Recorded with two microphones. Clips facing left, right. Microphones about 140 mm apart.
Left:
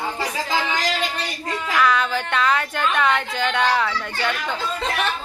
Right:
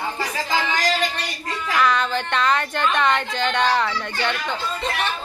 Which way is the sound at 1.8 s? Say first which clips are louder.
Even; 5° left (ahead or behind).